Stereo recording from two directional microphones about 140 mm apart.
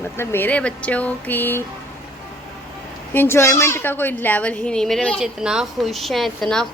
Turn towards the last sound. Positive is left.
turn(degrees=5)  # may be behind; listen again after turning